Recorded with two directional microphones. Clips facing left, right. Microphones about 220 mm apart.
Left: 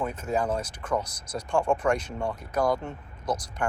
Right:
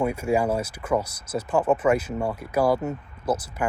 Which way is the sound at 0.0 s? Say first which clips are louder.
Right 5 dB; 10° right (ahead or behind).